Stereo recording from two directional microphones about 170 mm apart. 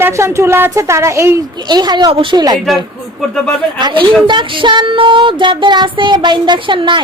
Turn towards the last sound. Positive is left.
turn(degrees=-30)  # may be behind; listen again after turning